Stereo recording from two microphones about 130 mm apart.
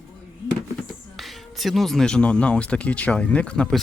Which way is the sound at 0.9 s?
Centre (ahead or behind).